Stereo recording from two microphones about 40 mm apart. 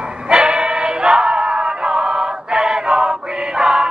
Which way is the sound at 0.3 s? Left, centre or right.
Right.